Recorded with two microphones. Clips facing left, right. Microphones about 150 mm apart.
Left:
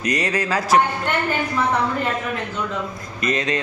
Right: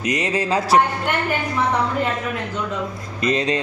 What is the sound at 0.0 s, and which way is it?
Speech, 20° right (ahead or behind).